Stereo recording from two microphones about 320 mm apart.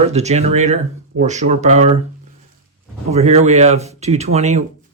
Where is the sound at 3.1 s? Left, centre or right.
Centre.